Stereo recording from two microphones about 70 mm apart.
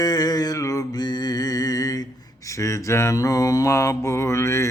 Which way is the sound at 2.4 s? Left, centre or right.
Left.